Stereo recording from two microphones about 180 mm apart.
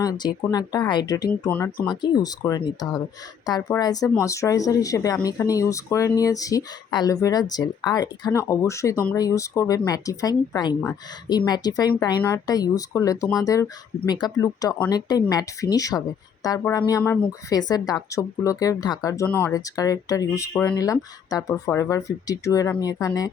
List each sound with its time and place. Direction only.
0.0 s speech: 20° left (ahead or behind)
1.3 s speech: 10° left (ahead or behind)
1.9 s speech: 20° left (ahead or behind)